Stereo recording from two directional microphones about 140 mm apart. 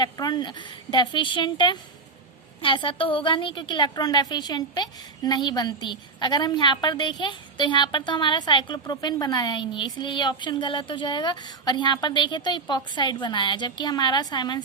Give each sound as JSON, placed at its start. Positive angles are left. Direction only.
{"t": 0.0, "sound": "a woman's voice", "side_deg": 30}